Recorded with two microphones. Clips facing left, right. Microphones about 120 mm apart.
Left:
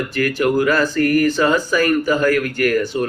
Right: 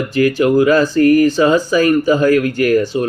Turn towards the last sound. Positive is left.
turn(degrees=-15)  # may be behind; listen again after turning